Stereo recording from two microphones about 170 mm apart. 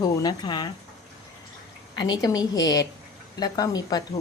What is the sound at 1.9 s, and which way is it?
A woman's voice, 25° left (ahead or behind).